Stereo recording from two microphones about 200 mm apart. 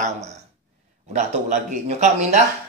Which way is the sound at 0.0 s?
35° right (ahead or behind).